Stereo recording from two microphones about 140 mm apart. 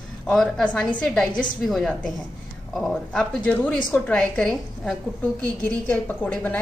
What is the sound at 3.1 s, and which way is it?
A woman's voice, 10° left (ahead or behind).